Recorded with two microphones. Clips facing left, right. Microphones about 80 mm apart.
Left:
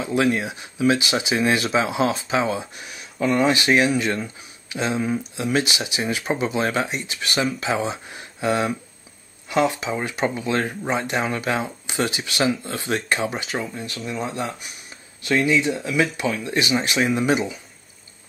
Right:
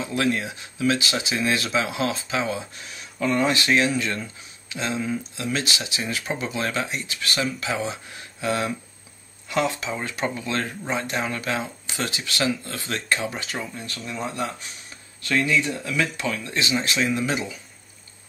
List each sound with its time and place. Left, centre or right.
0.0 s speech: centre